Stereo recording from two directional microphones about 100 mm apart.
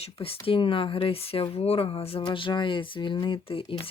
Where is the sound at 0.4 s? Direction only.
60° left (ahead or behind).